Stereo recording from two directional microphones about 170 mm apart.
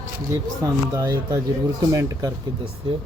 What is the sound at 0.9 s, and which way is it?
Speech, 20° right (ahead or behind).